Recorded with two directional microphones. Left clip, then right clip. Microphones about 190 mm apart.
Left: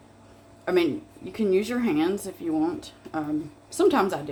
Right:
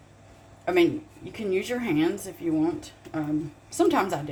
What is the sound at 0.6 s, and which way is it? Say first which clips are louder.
Speech: right 1 dB; 20° left (ahead or behind).